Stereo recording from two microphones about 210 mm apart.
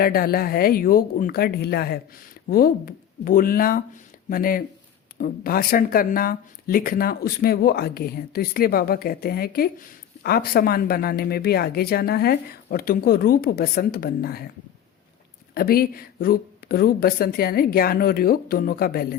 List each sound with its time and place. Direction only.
0.0 s speech: 45° left (ahead or behind)
15.5 s speech: 45° left (ahead or behind)